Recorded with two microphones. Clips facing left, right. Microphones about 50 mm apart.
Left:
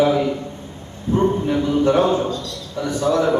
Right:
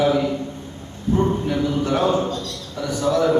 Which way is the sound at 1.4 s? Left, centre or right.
Centre.